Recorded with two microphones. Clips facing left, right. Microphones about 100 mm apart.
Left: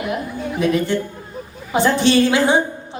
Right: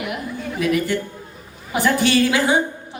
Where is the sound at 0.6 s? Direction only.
30° left (ahead or behind).